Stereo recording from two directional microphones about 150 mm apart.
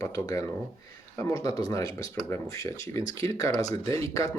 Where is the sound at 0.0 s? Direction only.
25° left (ahead or behind).